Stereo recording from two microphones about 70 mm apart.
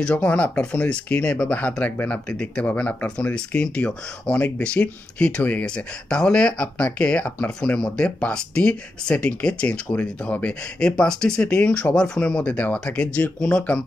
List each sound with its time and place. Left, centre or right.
0.0 s speech: centre